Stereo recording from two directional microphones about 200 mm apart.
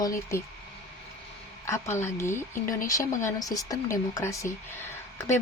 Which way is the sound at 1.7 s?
15° left (ahead or behind).